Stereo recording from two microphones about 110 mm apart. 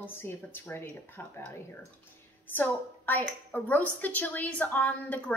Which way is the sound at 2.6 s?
15° left (ahead or behind).